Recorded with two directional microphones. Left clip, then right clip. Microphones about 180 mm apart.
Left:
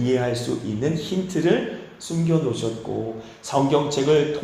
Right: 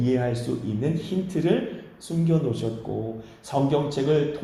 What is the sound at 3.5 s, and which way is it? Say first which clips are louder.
Speech: left 4 dB; centre (ahead or behind).